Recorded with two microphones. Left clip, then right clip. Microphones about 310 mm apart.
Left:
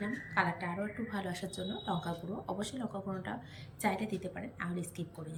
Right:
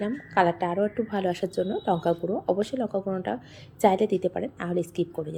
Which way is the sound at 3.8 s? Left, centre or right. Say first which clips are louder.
Right 14 dB; centre.